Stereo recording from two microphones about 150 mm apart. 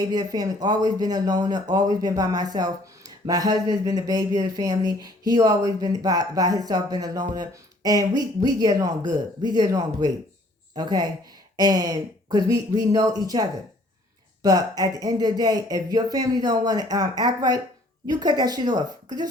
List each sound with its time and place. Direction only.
0.0 s speech: 25° right (ahead or behind)